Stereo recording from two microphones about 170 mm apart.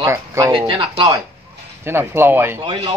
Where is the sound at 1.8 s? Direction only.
15° right (ahead or behind).